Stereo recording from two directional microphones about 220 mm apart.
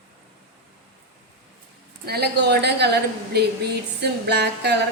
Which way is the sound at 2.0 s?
45° right (ahead or behind).